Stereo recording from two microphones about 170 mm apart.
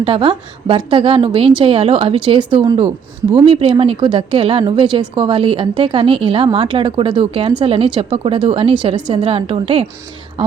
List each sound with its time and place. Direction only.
0.0 s a woman's voice: 30° right (ahead or behind)